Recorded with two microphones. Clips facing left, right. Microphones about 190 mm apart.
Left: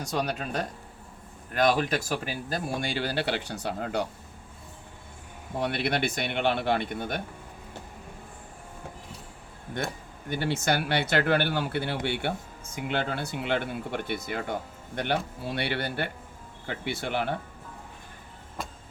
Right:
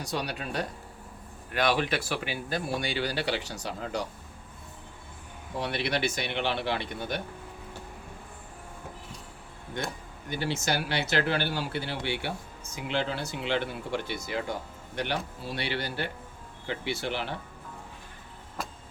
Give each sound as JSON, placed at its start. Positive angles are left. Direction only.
{"t": 0.0, "sound": "speech", "side_deg": 45}
{"t": 5.5, "sound": "speech", "side_deg": 50}
{"t": 10.2, "sound": "speech", "side_deg": 55}
{"t": 18.6, "sound": "music", "side_deg": 0}